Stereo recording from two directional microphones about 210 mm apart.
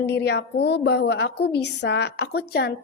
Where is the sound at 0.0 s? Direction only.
55° left (ahead or behind).